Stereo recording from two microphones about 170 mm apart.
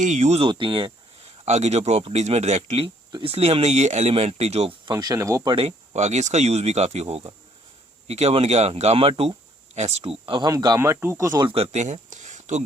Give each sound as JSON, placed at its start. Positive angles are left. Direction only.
{"t": 0.0, "sound": "a man's voice", "side_deg": -45}
{"t": 1.5, "sound": "a man's voice", "side_deg": -40}
{"t": 4.9, "sound": "a man's voice", "side_deg": -20}
{"t": 11.4, "sound": "speech", "side_deg": -35}